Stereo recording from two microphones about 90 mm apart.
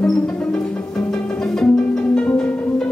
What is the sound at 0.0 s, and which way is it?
Music, 10° left (ahead or behind).